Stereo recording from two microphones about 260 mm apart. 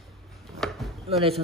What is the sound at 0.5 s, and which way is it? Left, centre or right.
Chopping, centre.